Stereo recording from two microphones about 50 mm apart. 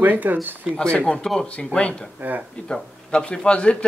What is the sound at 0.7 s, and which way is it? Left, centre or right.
Speech, centre.